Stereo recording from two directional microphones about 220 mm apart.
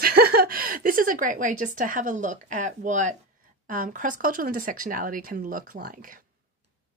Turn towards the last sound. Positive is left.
turn(degrees=-40)  # may be behind; listen again after turning